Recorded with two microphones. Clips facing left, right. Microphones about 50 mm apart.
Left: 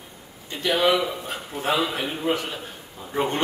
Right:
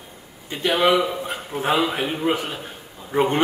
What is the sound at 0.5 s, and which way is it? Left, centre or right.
Speech, right.